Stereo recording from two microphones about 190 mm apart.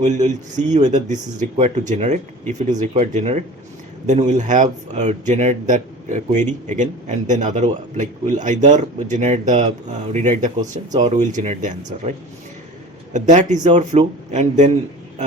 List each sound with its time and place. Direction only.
0.0 s speech: 40° right (ahead or behind)